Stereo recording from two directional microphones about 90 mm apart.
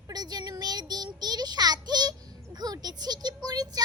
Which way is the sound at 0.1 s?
50° right (ahead or behind).